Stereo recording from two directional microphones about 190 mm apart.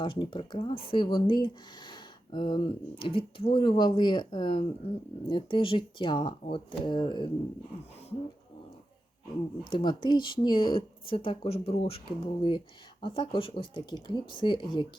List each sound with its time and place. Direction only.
0.0 s speech: 25° left (ahead or behind)
9.7 s speech: 25° left (ahead or behind)